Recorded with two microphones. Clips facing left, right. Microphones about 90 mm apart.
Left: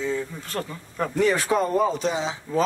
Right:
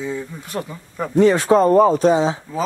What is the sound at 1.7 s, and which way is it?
Speech, 45° right (ahead or behind).